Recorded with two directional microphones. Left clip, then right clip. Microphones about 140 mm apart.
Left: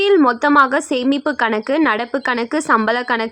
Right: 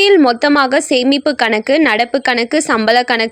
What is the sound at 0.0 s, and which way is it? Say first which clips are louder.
Speech: right 4 dB; 15° right (ahead or behind).